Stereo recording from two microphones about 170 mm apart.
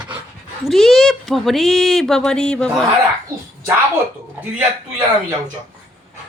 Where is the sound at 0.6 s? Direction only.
Centre (ahead or behind).